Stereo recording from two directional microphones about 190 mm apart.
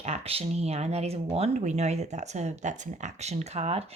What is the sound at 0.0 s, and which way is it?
Speech, 30° right (ahead or behind).